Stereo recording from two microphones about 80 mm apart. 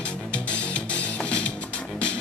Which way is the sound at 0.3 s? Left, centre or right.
Centre.